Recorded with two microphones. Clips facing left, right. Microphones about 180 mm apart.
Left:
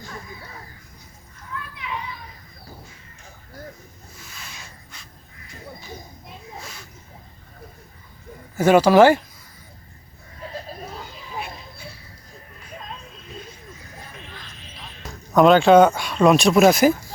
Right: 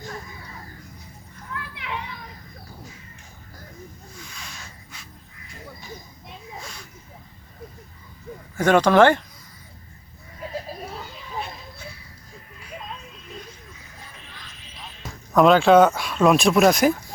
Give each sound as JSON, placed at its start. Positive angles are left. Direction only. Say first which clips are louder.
{"t": 1.7, "sound": "children playing", "louder": "left 1 dB", "side_deg": -70}
{"t": 6.2, "sound": "a sound", "louder": "right 3 dB", "side_deg": 0}
{"t": 8.5, "sound": "speech", "louder": "left 2 dB", "side_deg": 5}
{"t": 15.0, "sound": "speech", "louder": "left 1 dB", "side_deg": 0}